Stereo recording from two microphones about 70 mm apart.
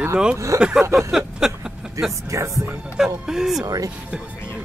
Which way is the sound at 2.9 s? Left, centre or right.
Centre.